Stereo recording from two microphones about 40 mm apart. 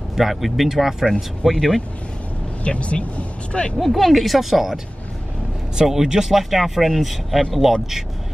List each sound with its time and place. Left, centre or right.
0.1 s speech: centre
1.4 s speech: centre
2.6 s speech: left
3.7 s speech: centre
5.8 s speech: centre